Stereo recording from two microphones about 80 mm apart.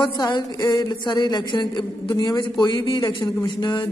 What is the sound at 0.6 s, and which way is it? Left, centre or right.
A man's voice, left.